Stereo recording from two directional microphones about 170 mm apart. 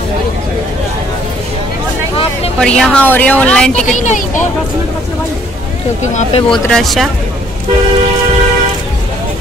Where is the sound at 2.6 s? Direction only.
5° left (ahead or behind).